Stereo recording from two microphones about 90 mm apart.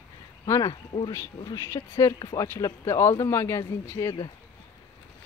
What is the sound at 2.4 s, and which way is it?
Speech, 30° left (ahead or behind).